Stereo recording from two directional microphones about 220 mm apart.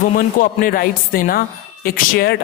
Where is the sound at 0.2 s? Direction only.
40° left (ahead or behind).